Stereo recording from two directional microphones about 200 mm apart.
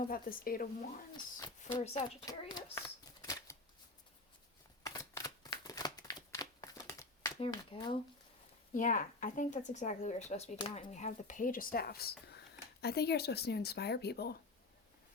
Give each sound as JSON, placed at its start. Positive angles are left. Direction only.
{"t": 0.0, "sound": "speech", "side_deg": 45}
{"t": 1.8, "sound": "speech", "side_deg": 30}
{"t": 2.2, "sound": "a sound", "side_deg": 20}
{"t": 4.8, "sound": "a sound", "side_deg": 15}
{"t": 7.3, "sound": "speech", "side_deg": 25}
{"t": 8.7, "sound": "speech", "side_deg": 40}